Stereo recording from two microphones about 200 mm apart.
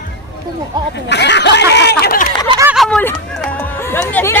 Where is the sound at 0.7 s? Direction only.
20° right (ahead or behind).